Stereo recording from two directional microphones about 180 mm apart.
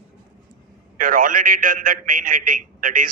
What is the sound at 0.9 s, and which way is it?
A man's voice, 50° right (ahead or behind).